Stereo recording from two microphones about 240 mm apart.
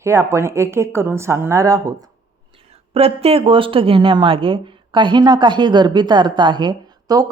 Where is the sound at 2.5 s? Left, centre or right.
Right.